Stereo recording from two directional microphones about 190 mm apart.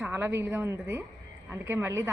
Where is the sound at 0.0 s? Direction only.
10° right (ahead or behind).